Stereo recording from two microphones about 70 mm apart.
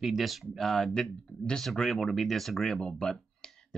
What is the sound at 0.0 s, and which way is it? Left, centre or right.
Speech, centre.